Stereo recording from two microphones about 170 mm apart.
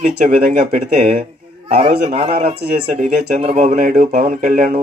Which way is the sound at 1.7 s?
40° right (ahead or behind).